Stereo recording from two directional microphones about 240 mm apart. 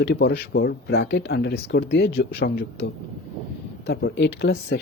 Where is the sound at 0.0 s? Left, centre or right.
Left.